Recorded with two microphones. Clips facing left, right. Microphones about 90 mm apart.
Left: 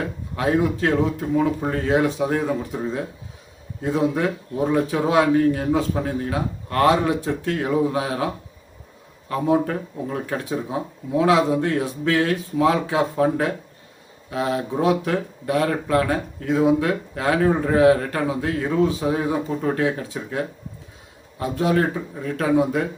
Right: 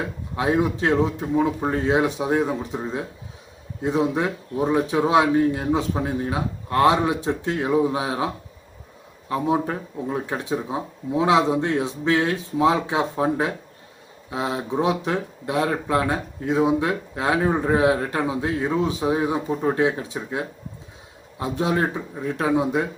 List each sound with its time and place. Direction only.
0.3 s speech: 20° right (ahead or behind)
9.3 s speech: 20° right (ahead or behind)